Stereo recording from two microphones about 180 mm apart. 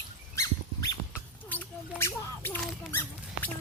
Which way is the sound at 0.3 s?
15° left (ahead or behind).